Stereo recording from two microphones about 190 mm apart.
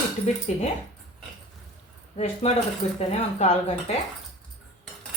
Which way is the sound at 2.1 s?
35° left (ahead or behind).